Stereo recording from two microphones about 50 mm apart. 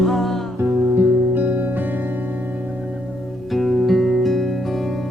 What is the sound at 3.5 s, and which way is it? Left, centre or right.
Music, centre.